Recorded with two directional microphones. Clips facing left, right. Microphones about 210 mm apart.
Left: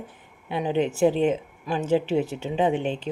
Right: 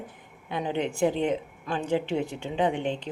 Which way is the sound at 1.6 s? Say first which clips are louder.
Left 3 dB; 5° left (ahead or behind).